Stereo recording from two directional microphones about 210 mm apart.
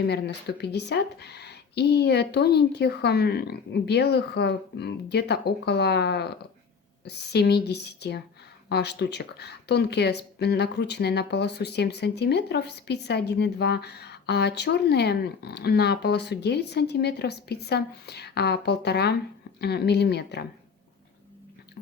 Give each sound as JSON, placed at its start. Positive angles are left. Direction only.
{"t": 0.0, "sound": "speech", "side_deg": 50}